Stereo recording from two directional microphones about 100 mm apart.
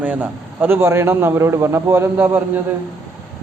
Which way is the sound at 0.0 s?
15° right (ahead or behind).